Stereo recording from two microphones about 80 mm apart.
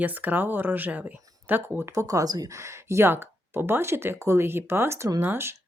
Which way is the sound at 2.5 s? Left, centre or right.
Right.